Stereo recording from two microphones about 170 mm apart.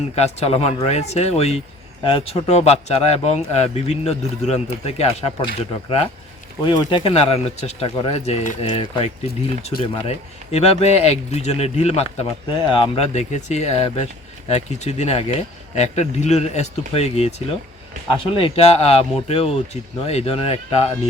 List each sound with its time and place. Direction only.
0.2 s speech: 35° left (ahead or behind)
6.7 s speech: 30° left (ahead or behind)